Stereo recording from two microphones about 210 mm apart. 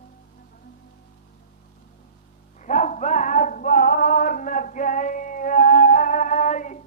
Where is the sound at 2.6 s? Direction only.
35° left (ahead or behind).